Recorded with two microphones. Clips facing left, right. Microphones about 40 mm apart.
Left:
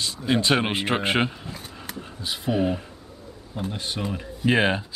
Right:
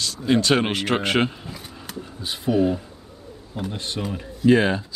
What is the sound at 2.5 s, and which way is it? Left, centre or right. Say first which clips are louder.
Speech: right 4 dB; left.